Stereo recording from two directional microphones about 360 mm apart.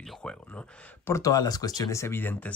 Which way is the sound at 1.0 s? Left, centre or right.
Centre.